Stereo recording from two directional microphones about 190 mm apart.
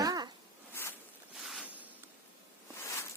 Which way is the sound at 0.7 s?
10° left (ahead or behind).